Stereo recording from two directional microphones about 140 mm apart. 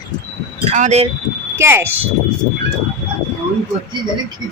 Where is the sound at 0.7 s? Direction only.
55° right (ahead or behind).